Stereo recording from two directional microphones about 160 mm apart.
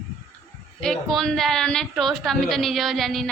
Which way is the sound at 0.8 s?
Centre (ahead or behind).